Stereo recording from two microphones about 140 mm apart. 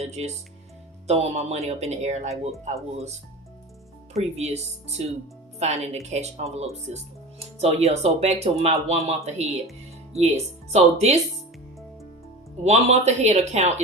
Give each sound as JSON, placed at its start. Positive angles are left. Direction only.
{"t": 0.0, "sound": "speech", "side_deg": -50}
{"t": 4.1, "sound": "speech", "side_deg": -50}
{"t": 10.7, "sound": "speech", "side_deg": -50}
{"t": 12.6, "sound": "speech", "side_deg": -50}